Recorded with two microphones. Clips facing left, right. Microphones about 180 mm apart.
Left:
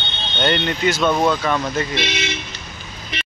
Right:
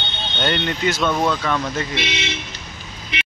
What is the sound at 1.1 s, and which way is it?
Speech, 15° left (ahead or behind).